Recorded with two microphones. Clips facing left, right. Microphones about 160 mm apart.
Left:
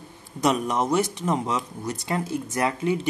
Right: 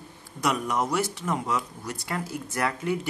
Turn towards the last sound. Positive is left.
turn(degrees=20)  # may be behind; listen again after turning